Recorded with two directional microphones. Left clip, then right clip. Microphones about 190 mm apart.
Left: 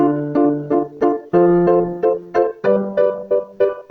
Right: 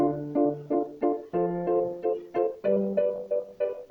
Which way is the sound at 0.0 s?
50° left (ahead or behind).